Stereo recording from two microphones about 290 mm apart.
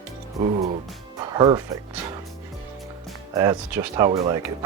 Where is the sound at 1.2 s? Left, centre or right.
Centre.